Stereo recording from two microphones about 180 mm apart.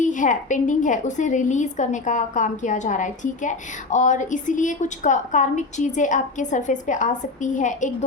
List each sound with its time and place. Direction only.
0.0 s a woman's voice: 45° left (ahead or behind)